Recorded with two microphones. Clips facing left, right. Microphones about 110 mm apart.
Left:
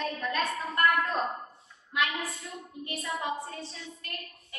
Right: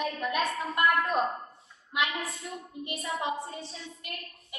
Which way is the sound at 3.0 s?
25° right (ahead or behind).